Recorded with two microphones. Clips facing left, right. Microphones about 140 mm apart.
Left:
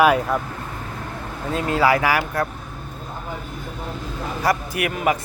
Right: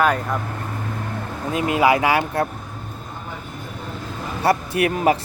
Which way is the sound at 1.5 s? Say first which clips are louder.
Right 1 dB; 15° right (ahead or behind).